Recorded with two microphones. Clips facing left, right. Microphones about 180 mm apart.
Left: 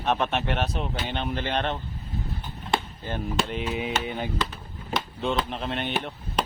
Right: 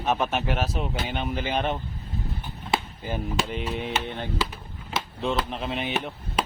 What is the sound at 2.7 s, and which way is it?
Chop, centre (ahead or behind).